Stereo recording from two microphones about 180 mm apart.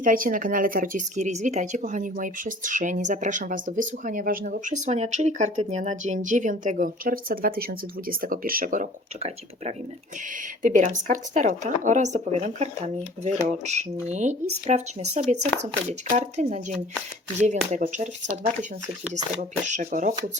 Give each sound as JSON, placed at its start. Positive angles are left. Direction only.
{"t": 0.0, "sound": "speech", "side_deg": -50}